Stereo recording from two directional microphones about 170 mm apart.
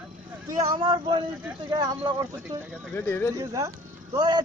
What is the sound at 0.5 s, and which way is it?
Speech, 20° right (ahead or behind).